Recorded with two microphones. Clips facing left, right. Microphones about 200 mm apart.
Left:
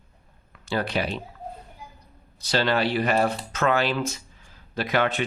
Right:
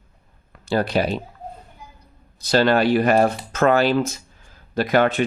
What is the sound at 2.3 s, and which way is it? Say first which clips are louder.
Speech: right 6 dB; 50° right (ahead or behind).